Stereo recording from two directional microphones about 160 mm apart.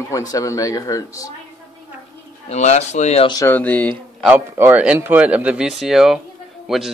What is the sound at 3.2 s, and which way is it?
Speech, 25° left (ahead or behind).